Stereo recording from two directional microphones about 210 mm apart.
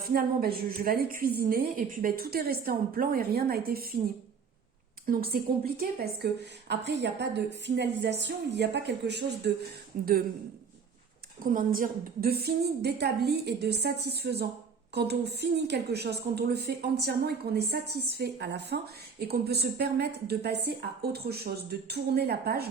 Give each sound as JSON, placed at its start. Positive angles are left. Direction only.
{"t": 0.0, "sound": "a woman's voice", "side_deg": -45}
{"t": 5.0, "sound": "a woman's voice", "side_deg": -45}
{"t": 9.9, "sound": "a woman's voice", "side_deg": -40}
{"t": 11.4, "sound": "a woman's voice", "side_deg": -40}